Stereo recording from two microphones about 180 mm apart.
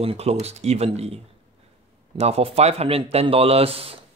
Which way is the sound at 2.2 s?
35° right (ahead or behind).